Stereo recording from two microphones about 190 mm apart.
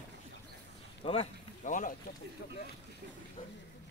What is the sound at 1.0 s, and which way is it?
Speech, 35° left (ahead or behind).